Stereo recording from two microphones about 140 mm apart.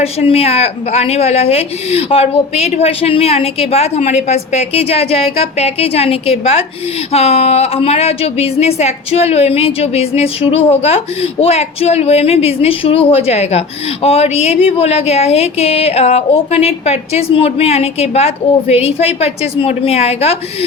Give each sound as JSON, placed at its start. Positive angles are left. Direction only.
{"t": 0.0, "sound": "a woman's voice", "side_deg": 45}